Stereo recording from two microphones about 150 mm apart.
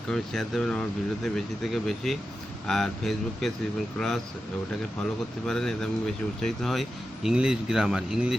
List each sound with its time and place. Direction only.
0.1 s speech: 5° left (ahead or behind)
5.5 s speech: 5° left (ahead or behind)